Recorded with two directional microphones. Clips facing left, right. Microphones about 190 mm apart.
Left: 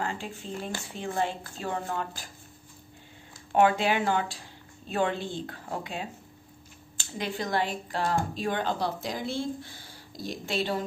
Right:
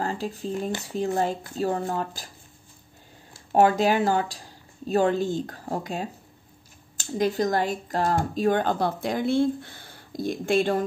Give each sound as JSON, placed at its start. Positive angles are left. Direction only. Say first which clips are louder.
{"t": 0.0, "sound": "speech", "louder": "right 5 dB", "side_deg": -40}
{"t": 3.5, "sound": "speech", "louder": "right 4 dB", "side_deg": -40}